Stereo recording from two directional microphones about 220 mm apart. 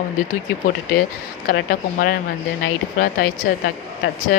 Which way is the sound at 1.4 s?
40° left (ahead or behind).